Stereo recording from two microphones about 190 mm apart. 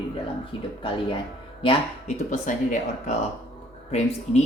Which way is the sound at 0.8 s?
25° left (ahead or behind).